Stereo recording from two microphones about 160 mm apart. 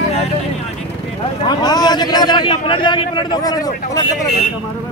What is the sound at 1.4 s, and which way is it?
A man's voice, 25° left (ahead or behind).